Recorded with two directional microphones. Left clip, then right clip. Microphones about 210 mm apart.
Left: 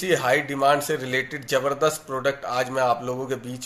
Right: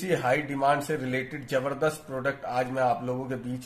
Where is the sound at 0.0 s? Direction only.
Centre (ahead or behind).